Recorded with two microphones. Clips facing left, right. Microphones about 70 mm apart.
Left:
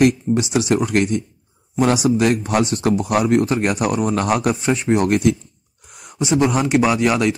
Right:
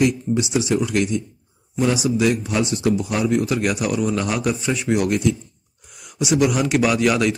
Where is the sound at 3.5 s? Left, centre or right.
Left.